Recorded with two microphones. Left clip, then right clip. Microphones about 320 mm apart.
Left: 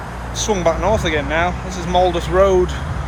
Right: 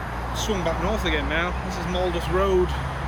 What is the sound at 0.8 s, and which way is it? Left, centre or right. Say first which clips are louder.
Speech: left 7 dB; centre.